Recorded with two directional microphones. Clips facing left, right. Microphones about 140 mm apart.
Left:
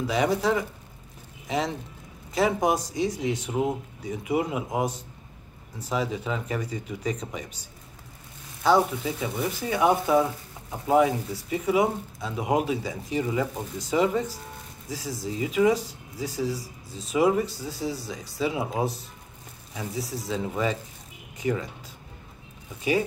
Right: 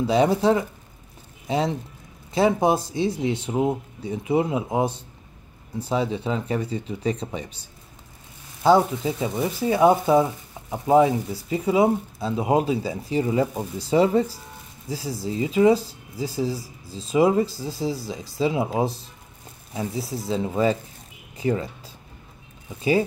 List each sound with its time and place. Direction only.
0.0 s speech: 30° right (ahead or behind)
2.3 s speech: 30° right (ahead or behind)
8.6 s speech: 30° right (ahead or behind)